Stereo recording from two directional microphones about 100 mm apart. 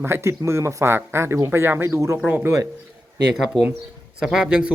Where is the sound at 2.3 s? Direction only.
15° right (ahead or behind).